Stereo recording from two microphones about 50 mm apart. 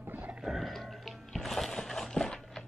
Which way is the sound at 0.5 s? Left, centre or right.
Centre.